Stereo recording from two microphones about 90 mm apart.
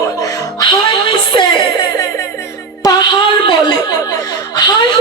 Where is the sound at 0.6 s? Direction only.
60° left (ahead or behind).